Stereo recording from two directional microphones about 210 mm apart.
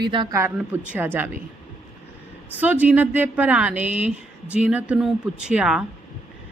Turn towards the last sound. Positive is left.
turn(degrees=-5)  # may be behind; listen again after turning